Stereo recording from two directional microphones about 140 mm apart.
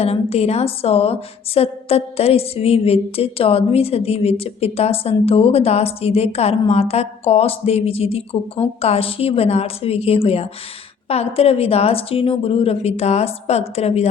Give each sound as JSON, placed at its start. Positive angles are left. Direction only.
{"t": 0.0, "sound": "a woman's voice", "side_deg": 45}